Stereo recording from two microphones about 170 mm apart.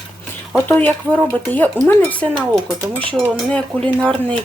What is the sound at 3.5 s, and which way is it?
Speech, 5° left (ahead or behind).